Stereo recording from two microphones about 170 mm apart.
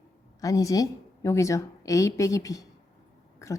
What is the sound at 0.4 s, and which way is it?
A woman's voice, 20° left (ahead or behind).